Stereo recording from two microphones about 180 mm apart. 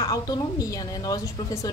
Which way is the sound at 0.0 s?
20° left (ahead or behind).